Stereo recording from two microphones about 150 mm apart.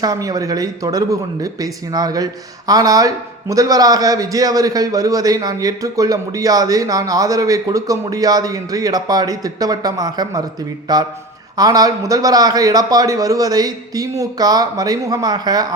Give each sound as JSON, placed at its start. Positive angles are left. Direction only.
{"t": 0.0, "sound": "speech", "side_deg": -25}